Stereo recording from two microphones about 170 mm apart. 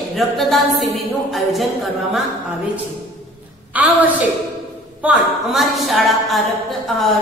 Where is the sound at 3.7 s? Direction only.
10° right (ahead or behind).